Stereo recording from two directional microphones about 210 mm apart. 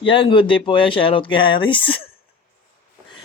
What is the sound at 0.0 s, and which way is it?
Speech, 25° left (ahead or behind).